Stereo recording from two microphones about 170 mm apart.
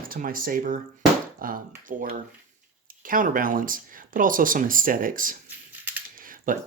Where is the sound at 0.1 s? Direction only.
55° right (ahead or behind).